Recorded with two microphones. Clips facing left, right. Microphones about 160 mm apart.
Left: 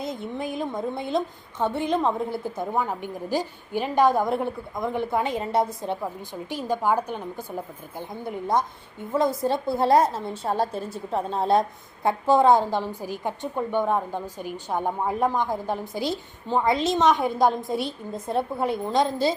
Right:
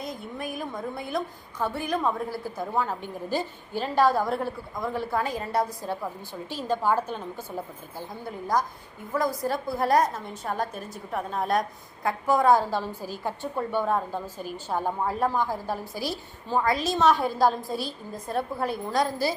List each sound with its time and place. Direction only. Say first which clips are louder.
0.0 s a woman's voice: left 4 dB; 25° left (ahead or behind)